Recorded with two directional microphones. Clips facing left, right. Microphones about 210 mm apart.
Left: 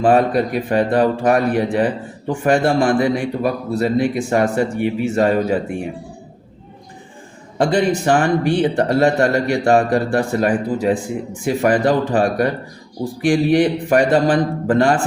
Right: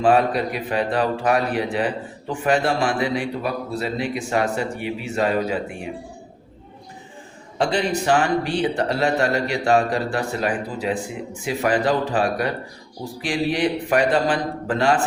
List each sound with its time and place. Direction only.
0.0 s a man's voice: 45° left (ahead or behind)
7.6 s a man's voice: 50° left (ahead or behind)